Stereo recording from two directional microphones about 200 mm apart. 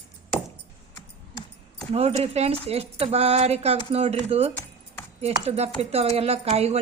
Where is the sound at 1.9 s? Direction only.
30° right (ahead or behind).